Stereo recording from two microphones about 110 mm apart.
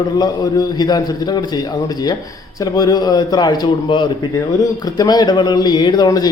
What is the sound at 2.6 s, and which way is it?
A man's voice, 35° left (ahead or behind).